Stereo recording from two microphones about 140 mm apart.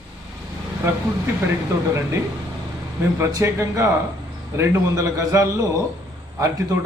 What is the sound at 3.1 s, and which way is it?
A man's voice, 20° right (ahead or behind).